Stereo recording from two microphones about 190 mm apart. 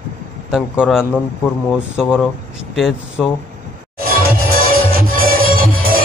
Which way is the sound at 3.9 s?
50° right (ahead or behind).